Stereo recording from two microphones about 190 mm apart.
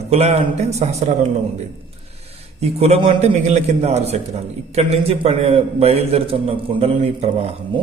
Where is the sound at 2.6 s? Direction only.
35° right (ahead or behind).